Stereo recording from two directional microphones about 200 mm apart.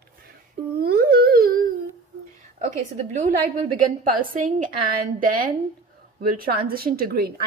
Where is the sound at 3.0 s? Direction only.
35° right (ahead or behind).